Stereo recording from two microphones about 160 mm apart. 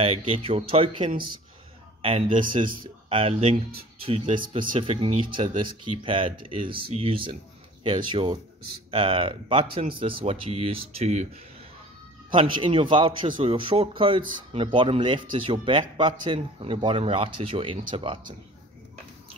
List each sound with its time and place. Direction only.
0.3 s speech: 35° right (ahead or behind)
12.3 s speech: 30° right (ahead or behind)